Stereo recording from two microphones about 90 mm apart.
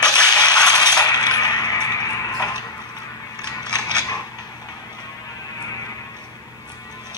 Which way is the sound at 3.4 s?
50° left (ahead or behind).